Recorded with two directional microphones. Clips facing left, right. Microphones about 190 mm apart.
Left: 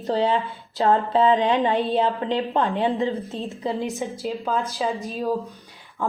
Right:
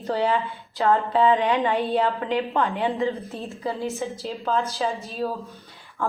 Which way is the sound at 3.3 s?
20° left (ahead or behind).